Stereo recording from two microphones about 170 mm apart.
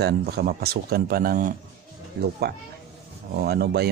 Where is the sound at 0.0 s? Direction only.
70° right (ahead or behind).